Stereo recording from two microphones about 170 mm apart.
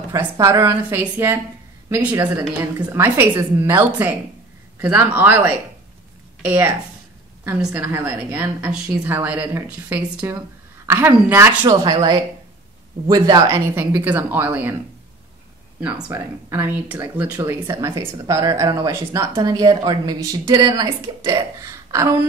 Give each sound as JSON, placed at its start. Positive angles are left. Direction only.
{"t": 0.1, "sound": "a woman's voice", "side_deg": -15}
{"t": 13.7, "sound": "a woman's voice", "side_deg": -10}
{"t": 16.1, "sound": "speech", "side_deg": -15}